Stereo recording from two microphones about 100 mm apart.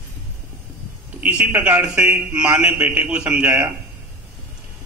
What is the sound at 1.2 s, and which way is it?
A man's voice, 15° right (ahead or behind).